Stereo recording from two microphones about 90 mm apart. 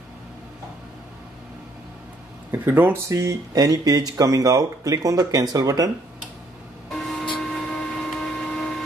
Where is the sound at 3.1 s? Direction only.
35° right (ahead or behind).